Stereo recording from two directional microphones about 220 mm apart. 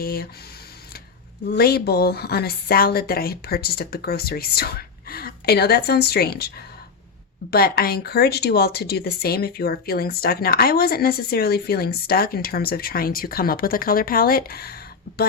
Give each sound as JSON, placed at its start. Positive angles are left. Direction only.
{"t": 0.0, "sound": "speech", "side_deg": 45}
{"t": 1.5, "sound": "speech", "side_deg": 45}
{"t": 7.5, "sound": "speech", "side_deg": 45}